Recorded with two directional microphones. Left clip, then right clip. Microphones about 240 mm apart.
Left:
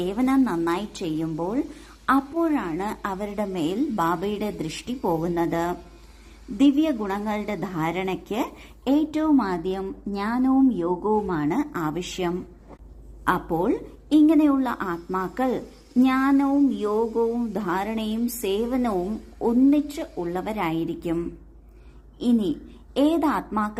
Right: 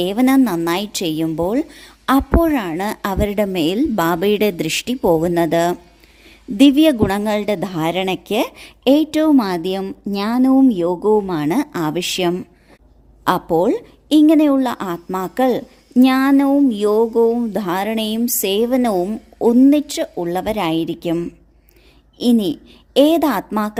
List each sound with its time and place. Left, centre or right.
0.0 s a woman's voice: right